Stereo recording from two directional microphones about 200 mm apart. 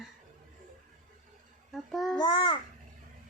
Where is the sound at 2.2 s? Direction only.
25° left (ahead or behind).